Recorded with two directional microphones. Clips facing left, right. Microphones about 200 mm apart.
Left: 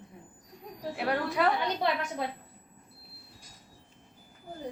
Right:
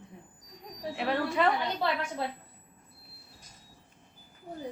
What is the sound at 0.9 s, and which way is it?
Speech, centre (ahead or behind).